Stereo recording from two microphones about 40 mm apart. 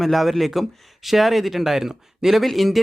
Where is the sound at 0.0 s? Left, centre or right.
Centre.